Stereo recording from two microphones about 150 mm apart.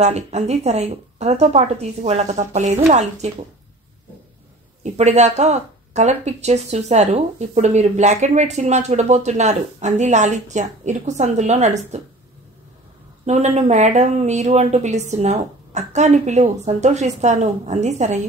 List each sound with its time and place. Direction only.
0.0 s speech: 45° right (ahead or behind)
4.9 s speech: 50° right (ahead or behind)
13.2 s speech: 45° right (ahead or behind)